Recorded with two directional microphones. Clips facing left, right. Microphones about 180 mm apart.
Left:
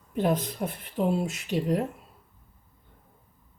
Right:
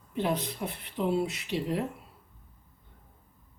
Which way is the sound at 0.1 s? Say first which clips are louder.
Left 4 dB; 45° left (ahead or behind).